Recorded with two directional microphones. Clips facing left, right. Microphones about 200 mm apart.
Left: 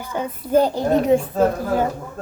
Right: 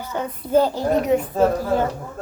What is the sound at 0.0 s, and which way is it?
Speech, 10° left (ahead or behind).